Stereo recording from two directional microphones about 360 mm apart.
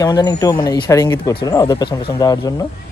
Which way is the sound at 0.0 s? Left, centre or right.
Centre.